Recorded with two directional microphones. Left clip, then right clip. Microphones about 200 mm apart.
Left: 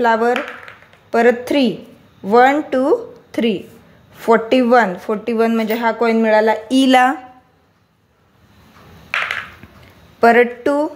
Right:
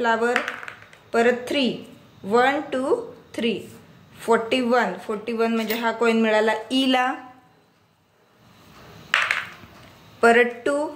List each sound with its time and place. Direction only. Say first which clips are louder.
0.0 s speech: left 6 dB; 40° left (ahead or behind)
10.2 s speech: left 5 dB; 35° left (ahead or behind)